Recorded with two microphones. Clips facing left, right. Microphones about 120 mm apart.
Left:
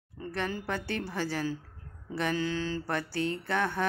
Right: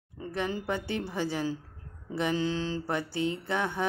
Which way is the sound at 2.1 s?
20° right (ahead or behind).